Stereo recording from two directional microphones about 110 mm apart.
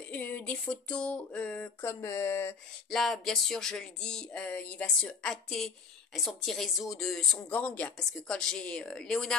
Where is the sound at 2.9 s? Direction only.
Centre (ahead or behind).